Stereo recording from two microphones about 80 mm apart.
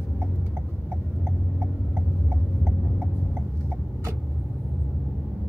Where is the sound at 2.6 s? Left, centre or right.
Centre.